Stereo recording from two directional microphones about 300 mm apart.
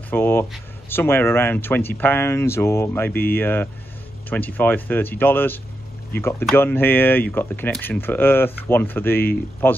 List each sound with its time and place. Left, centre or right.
0.1 s speech: centre